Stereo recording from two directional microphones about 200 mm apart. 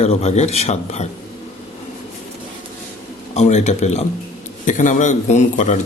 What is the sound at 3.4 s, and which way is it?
Speech, 35° left (ahead or behind).